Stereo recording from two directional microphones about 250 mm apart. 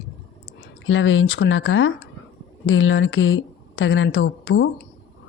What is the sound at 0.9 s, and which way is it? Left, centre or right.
A woman's voice, left.